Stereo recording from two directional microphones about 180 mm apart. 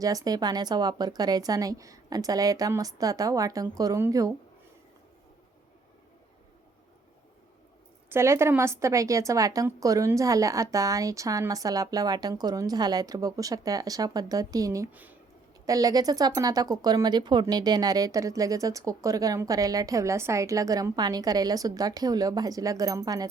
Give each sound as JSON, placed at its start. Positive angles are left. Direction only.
{"t": 0.0, "sound": "speech", "side_deg": -20}
{"t": 8.1, "sound": "speech", "side_deg": -15}